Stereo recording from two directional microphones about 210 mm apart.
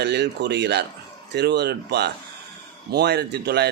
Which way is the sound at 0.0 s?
55° right (ahead or behind).